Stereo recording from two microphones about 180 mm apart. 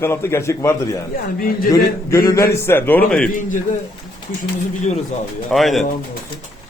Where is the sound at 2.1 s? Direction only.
20° left (ahead or behind).